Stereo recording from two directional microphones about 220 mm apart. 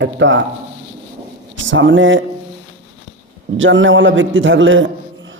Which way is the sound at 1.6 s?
60° right (ahead or behind).